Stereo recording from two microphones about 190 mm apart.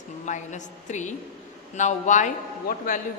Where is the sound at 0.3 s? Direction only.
40° left (ahead or behind).